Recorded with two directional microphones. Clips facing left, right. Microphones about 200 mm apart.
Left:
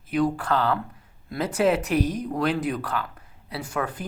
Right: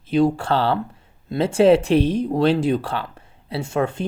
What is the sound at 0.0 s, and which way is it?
Speech, 25° right (ahead or behind).